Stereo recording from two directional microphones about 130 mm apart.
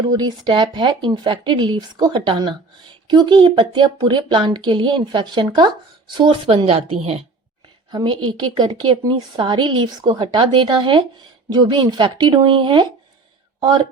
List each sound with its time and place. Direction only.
0.1 s speech: 35° right (ahead or behind); by 7.3 s 50° right (ahead or behind)
7.9 s speech: 35° right (ahead or behind)